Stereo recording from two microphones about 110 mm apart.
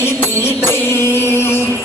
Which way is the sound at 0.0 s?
20° left (ahead or behind).